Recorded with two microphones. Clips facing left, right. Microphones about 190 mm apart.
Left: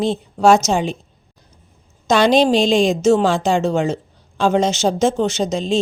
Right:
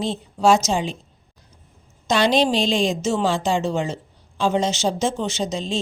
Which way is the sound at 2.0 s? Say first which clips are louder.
Left 5 dB; 50° left (ahead or behind).